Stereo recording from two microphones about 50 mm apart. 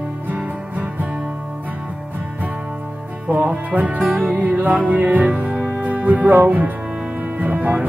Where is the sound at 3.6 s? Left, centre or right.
Right.